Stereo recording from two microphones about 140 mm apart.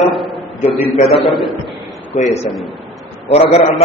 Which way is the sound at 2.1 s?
55° left (ahead or behind).